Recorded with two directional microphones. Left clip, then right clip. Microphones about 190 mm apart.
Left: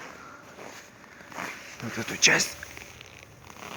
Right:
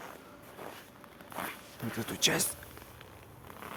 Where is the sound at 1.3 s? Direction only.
50° left (ahead or behind).